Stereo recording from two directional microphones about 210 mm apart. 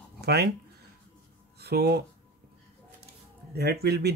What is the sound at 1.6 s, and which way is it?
Speech, 50° right (ahead or behind).